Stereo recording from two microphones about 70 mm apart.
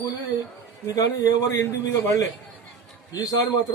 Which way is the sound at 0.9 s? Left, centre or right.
Left.